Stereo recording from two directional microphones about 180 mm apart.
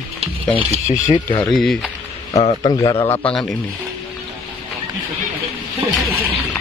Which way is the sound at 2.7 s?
25° left (ahead or behind).